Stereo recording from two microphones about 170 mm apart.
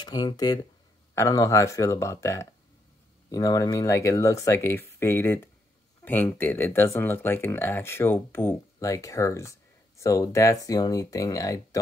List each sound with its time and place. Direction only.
0.0 s speech: 25° left (ahead or behind)